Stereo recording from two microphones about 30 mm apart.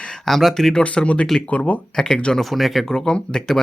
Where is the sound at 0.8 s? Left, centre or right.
Left.